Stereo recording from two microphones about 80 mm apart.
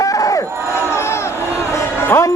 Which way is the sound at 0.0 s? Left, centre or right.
Left.